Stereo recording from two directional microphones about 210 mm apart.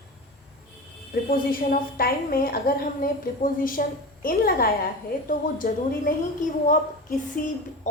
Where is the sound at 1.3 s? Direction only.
45° left (ahead or behind).